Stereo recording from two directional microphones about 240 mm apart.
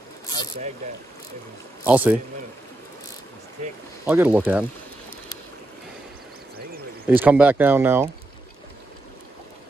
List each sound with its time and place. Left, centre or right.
1.9 s speech: centre
4.0 s speech: centre
7.1 s speech: centre